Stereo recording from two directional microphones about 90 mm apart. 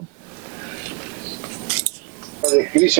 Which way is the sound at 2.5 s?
20° right (ahead or behind).